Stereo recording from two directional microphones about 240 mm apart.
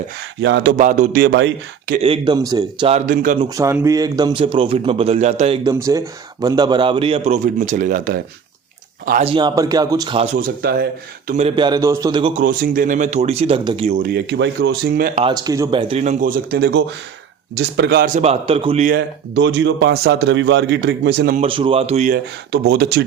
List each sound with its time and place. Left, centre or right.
0.4 s speech: right
0.8 s speech: right
2.0 s speech: right
2.9 s speech: right
3.5 s a man's voice: centre
5.6 s a man's voice: centre
10.3 s speech: right
11.3 s a man's voice: right
15.2 s a man's voice: centre
18.9 s speech: right
21.4 s a man's voice: right